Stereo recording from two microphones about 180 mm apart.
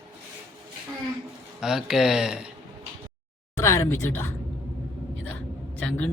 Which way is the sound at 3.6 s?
15° left (ahead or behind).